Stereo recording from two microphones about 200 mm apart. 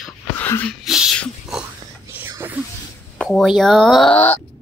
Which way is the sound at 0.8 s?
Centre (ahead or behind).